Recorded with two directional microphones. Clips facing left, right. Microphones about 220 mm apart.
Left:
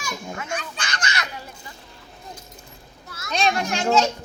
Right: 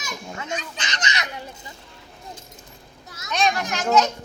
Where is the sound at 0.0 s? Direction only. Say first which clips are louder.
Left 2 dB; 20° right (ahead or behind).